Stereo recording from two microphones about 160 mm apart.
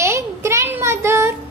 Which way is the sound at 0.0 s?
15° right (ahead or behind).